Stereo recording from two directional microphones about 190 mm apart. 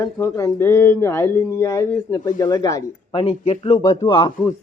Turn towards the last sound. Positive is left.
turn(degrees=25)  # may be behind; listen again after turning